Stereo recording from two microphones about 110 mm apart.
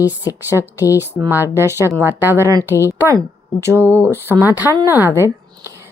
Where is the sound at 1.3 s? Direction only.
20° right (ahead or behind).